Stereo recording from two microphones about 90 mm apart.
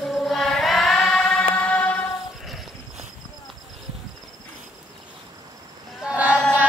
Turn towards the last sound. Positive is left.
turn(degrees=10)  # may be behind; listen again after turning